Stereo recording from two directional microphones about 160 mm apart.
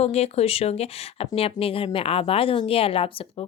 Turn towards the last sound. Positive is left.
turn(degrees=35)  # may be behind; listen again after turning